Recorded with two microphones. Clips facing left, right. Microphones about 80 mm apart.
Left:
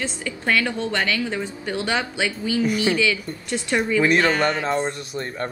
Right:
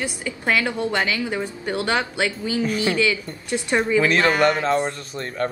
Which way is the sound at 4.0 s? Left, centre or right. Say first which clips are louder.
Even; centre.